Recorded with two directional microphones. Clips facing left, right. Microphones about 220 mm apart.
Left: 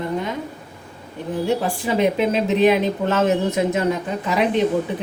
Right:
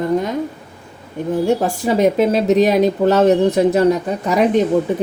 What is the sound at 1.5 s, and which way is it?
A woman's voice, 40° right (ahead or behind).